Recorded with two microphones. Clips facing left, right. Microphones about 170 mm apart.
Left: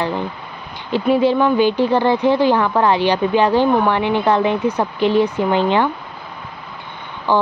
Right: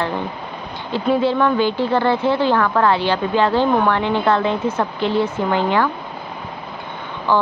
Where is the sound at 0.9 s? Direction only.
15° left (ahead or behind).